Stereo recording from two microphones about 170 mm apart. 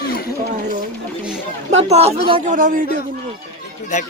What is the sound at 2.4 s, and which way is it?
Speech, 50° right (ahead or behind).